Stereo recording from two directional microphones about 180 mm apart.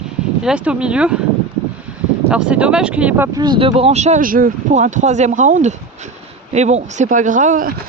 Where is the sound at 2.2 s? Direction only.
5° right (ahead or behind).